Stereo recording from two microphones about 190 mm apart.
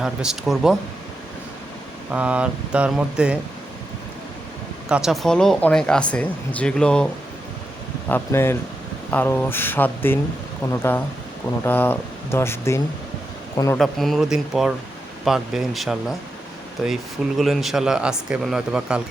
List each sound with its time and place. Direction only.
0.0 s speech: 5° right (ahead or behind)
2.0 s speech: 5° right (ahead or behind)
4.9 s speech: 5° right (ahead or behind)
8.1 s speech: 15° left (ahead or behind)
13.7 s speech: centre (ahead or behind)